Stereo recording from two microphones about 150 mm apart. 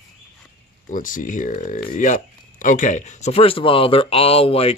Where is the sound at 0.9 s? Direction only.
65° left (ahead or behind).